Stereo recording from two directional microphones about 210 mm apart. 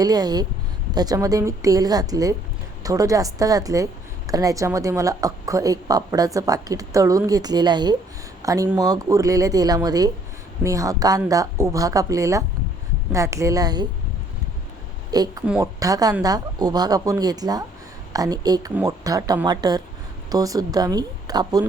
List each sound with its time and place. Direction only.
0.0 s a woman's voice: 20° right (ahead or behind)
15.1 s a woman's voice: 20° right (ahead or behind)